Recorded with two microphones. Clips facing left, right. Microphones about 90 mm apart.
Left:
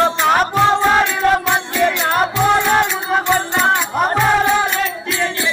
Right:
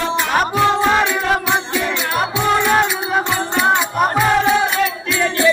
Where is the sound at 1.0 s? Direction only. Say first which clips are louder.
Left 2 dB; 5° right (ahead or behind).